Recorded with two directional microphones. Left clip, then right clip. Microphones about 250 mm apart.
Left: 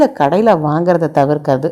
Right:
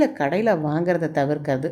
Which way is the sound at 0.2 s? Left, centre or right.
Centre.